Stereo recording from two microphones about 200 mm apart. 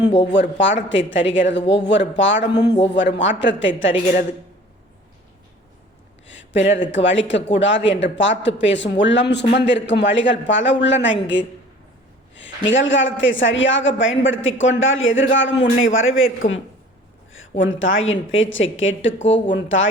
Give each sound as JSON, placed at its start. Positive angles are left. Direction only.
{"t": 0.6, "sound": "a woman's voice", "side_deg": 65}
{"t": 6.2, "sound": "a woman's voice", "side_deg": 65}
{"t": 17.6, "sound": "a woman's voice", "side_deg": 75}